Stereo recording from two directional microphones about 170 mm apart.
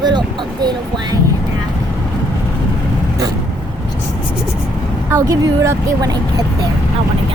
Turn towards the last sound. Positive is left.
turn(degrees=-20)  # may be behind; listen again after turning